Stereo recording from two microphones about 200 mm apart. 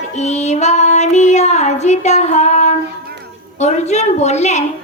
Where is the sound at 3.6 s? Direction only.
35° left (ahead or behind).